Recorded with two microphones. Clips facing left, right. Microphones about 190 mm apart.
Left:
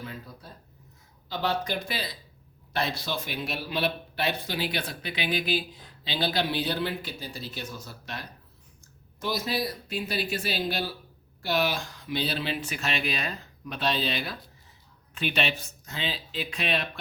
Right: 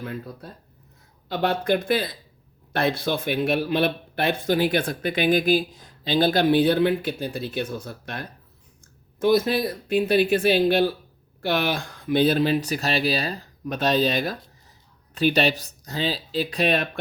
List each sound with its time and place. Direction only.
0.0 s a man's voice: 55° right (ahead or behind)